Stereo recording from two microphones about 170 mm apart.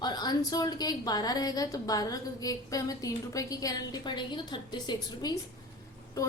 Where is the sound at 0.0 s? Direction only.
25° left (ahead or behind).